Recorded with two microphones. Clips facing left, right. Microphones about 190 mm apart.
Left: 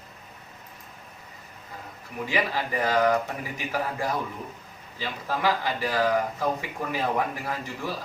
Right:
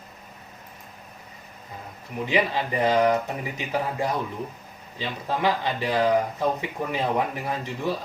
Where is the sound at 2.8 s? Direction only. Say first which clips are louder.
Right 2 dB; 20° right (ahead or behind).